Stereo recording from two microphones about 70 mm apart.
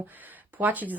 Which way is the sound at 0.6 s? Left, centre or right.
Right.